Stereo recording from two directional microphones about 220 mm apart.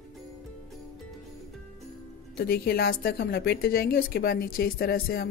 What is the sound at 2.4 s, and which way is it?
A woman's voice, 45° left (ahead or behind).